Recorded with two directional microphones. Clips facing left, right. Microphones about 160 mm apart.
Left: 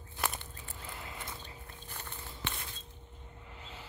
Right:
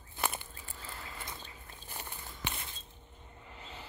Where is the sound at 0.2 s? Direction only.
5° right (ahead or behind).